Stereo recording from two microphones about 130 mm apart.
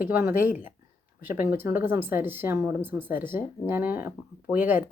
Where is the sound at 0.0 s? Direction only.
15° right (ahead or behind).